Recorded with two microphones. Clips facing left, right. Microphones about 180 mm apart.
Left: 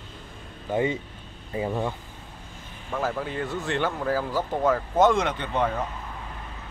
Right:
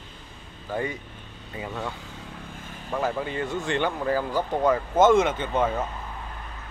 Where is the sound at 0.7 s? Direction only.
20° left (ahead or behind).